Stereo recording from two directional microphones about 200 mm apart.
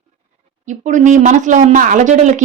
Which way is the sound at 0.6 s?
40° right (ahead or behind).